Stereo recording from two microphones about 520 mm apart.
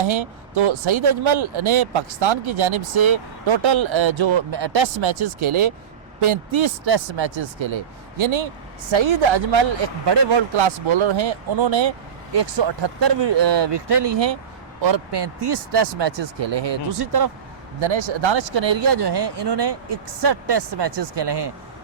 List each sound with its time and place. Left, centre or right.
0.0 s speech: right
17.7 s speech: right